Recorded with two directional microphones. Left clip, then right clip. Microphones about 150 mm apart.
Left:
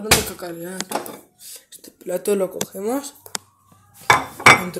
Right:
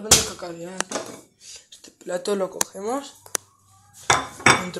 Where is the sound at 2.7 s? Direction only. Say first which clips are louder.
Left 3 dB; 45° left (ahead or behind).